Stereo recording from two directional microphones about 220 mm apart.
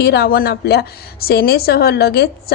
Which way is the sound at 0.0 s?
45° left (ahead or behind).